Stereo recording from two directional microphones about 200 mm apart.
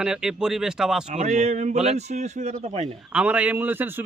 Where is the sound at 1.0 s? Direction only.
35° right (ahead or behind).